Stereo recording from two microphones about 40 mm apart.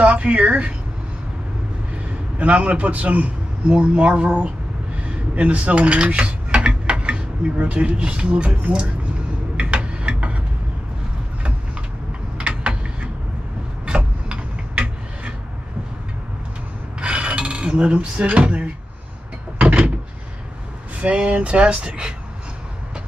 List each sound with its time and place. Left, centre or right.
0.0 s speech: right
2.3 s a man's voice: right
4.9 s mechanisms: right
7.5 s a man's voice: right
9.6 s tick-tock: right
12.4 s typing: right
13.8 s a sound: right
17.0 s filing: right
21.0 s speech: right